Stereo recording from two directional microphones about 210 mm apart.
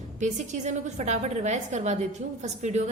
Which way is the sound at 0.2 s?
35° right (ahead or behind).